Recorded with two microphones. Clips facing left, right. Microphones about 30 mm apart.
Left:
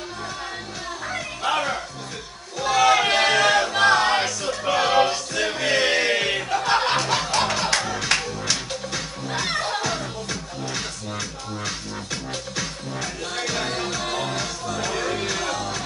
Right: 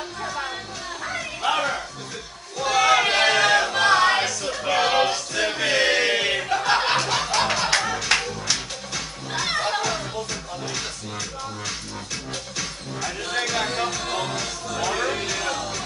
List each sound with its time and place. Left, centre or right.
1.0 s music: centre
2.6 s a sound: centre
3.7 s music: centre
13.8 s music: centre